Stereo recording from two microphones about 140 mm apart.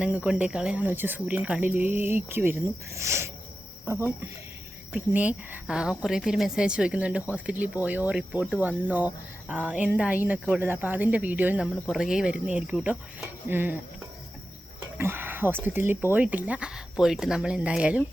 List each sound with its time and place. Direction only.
0.0 s speech: 10° right (ahead or behind)
14.9 s speech: 15° right (ahead or behind)